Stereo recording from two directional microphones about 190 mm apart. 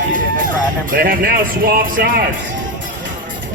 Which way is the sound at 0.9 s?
50° right (ahead or behind).